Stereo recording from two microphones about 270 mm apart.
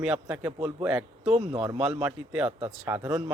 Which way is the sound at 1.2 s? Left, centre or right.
Right.